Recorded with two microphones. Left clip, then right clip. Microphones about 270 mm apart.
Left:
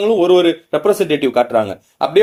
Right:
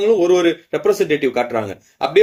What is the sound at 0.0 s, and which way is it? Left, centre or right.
Speech, centre.